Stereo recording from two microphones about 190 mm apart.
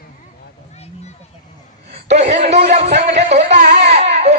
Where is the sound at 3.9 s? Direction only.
35° right (ahead or behind).